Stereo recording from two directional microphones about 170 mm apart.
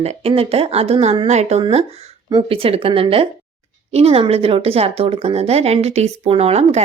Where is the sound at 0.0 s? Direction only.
40° right (ahead or behind).